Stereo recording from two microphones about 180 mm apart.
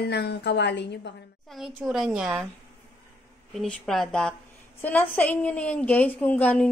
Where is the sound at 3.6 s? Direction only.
Centre (ahead or behind).